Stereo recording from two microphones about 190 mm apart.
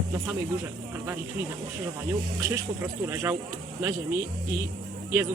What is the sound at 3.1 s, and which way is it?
Speech, 15° right (ahead or behind).